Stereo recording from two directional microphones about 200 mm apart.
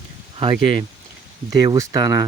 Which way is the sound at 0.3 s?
25° right (ahead or behind).